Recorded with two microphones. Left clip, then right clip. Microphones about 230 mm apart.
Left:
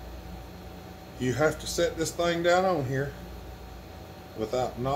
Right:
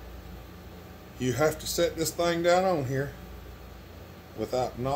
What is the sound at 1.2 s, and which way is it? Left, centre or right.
A man's voice, right.